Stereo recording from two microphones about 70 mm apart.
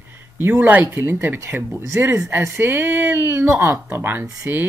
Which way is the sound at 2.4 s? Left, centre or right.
Right.